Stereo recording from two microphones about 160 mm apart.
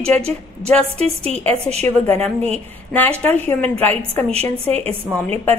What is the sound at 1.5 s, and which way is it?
A woman's voice, 40° right (ahead or behind).